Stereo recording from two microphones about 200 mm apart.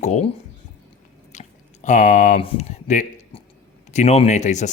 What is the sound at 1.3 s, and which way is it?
Speech, 35° left (ahead or behind).